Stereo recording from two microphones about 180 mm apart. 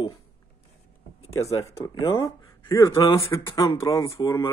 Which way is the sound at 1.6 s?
25° left (ahead or behind).